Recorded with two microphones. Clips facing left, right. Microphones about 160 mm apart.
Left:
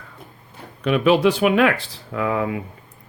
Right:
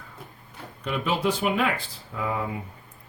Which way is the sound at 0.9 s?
80° left.